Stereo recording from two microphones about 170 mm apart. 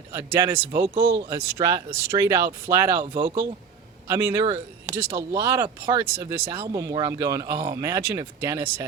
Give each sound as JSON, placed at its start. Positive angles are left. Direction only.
{"t": 0.1, "sound": "speech", "side_deg": -15}
{"t": 0.9, "sound": "speech", "side_deg": -30}
{"t": 1.6, "sound": "speech", "side_deg": -20}
{"t": 3.0, "sound": "speech", "side_deg": -30}
{"t": 4.1, "sound": "speech", "side_deg": -15}
{"t": 4.4, "sound": "speech", "side_deg": -30}
{"t": 4.9, "sound": "speech", "side_deg": -15}
{"t": 6.6, "sound": "speech", "side_deg": -25}